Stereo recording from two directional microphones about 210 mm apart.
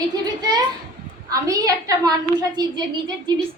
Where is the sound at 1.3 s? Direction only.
15° right (ahead or behind).